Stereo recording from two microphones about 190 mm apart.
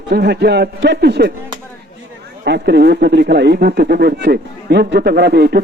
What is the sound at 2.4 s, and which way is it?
Speech, 60° right (ahead or behind).